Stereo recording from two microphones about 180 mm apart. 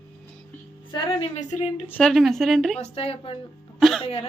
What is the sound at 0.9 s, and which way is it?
Speech, 25° left (ahead or behind).